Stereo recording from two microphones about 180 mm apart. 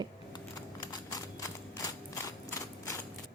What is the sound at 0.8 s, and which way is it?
Horse, 20° left (ahead or behind).